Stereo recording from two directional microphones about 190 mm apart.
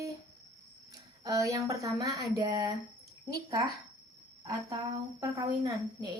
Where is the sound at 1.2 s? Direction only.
15° right (ahead or behind).